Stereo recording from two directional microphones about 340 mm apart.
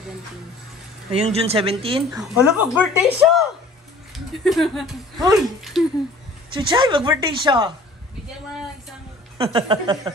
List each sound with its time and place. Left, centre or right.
1.1 s speech: centre
2.2 s speech: centre
6.5 s speech: centre
9.5 s speech: centre